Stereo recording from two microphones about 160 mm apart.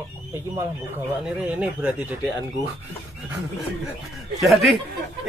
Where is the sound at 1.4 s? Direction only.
5° right (ahead or behind).